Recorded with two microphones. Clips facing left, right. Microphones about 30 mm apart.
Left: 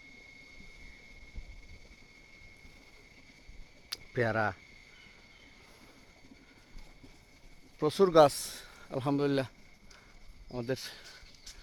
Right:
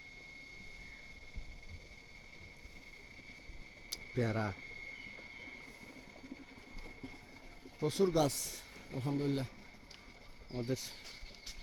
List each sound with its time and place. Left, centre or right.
4.1 s speech: left
7.8 s speech: left
10.7 s speech: left
11.0 s a sound: centre